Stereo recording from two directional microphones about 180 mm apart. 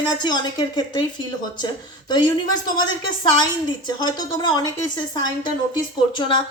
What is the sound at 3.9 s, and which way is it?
Speech, 25° left (ahead or behind).